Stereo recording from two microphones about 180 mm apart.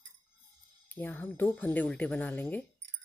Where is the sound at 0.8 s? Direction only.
10° left (ahead or behind).